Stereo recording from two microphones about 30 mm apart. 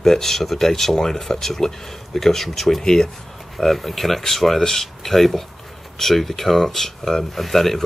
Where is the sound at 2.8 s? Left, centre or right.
Centre.